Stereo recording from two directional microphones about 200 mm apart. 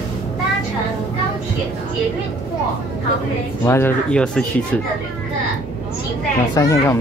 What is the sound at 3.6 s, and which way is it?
Speech, 10° left (ahead or behind).